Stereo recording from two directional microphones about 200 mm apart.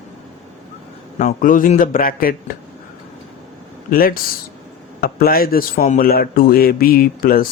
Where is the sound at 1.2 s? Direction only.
40° left (ahead or behind).